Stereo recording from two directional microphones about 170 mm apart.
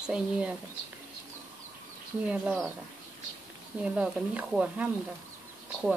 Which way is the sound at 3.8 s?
5° right (ahead or behind).